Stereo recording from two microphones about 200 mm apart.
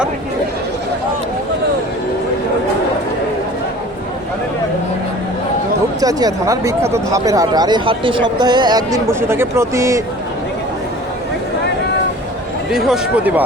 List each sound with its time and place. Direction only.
6.0 s speech: 20° right (ahead or behind)
12.7 s speech: centre (ahead or behind)